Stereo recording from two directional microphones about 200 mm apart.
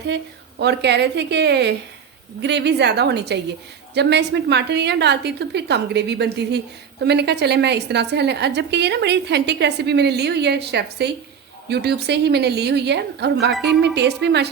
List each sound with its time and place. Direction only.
0.6 s a woman's voice: 55° right (ahead or behind)